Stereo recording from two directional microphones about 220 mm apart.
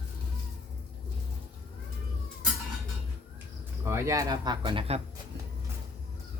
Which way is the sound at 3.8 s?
15° right (ahead or behind).